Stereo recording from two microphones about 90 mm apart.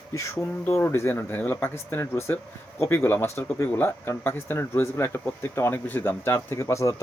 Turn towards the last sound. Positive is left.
turn(degrees=30)  # may be behind; listen again after turning